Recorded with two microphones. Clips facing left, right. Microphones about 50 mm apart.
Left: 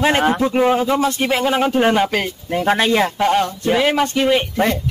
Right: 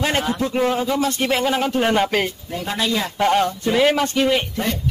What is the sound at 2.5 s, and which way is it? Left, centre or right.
Speech, left.